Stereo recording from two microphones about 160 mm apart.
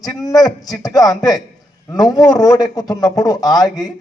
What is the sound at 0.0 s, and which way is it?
A man's voice, 25° left (ahead or behind).